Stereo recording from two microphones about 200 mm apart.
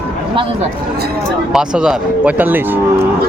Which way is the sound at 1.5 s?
5° right (ahead or behind).